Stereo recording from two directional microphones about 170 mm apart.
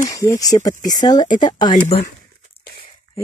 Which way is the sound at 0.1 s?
20° left (ahead or behind).